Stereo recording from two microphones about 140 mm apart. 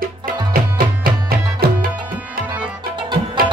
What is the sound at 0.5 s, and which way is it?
Music, 90° right.